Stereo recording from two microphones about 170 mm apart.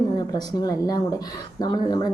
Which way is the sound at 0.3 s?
20° left (ahead or behind).